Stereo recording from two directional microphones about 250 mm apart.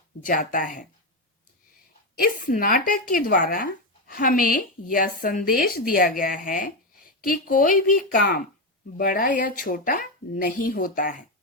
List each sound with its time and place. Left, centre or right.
0.3 s speech: left
2.1 s speech: left